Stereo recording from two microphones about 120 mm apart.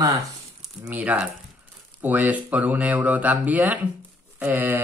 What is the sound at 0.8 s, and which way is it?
Speech, 10° right (ahead or behind).